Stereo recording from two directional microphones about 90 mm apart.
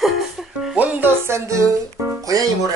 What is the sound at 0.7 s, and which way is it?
Music, 20° right (ahead or behind).